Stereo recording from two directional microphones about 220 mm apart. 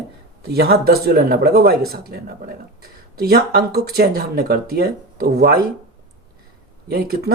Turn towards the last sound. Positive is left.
turn(degrees=-45)  # may be behind; listen again after turning